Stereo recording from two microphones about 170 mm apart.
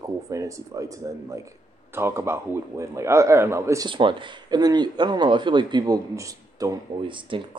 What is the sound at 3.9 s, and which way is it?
Speech, 30° right (ahead or behind).